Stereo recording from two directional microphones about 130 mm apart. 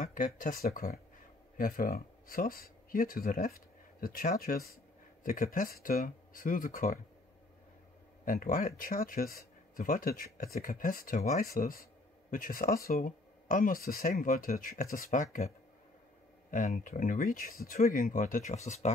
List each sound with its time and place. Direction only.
0.1 s speech: 90° left
8.3 s speech: 90° left; by 18.9 s 60° left (ahead or behind)